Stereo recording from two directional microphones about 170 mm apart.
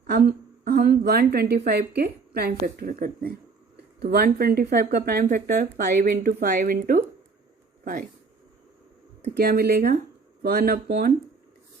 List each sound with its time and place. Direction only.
0.1 s a woman's voice: 60° right (ahead or behind)
4.0 s speech: 70° right (ahead or behind)
5.2 s a woman's voice: 55° right (ahead or behind)
9.3 s a woman's voice: 65° right (ahead or behind)